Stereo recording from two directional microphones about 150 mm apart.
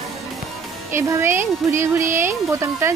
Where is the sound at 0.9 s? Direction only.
15° right (ahead or behind).